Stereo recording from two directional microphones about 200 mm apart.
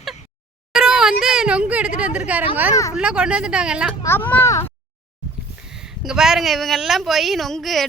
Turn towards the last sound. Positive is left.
turn(degrees=0)  # may be behind; listen again after turning